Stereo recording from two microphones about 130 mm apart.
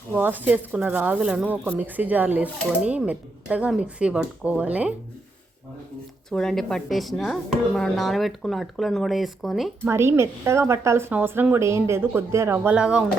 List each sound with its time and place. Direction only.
0.1 s speech: 15° right (ahead or behind)
6.3 s speech: 5° left (ahead or behind)
9.8 s a woman's voice: 20° right (ahead or behind)
12.7 s speech: 10° right (ahead or behind)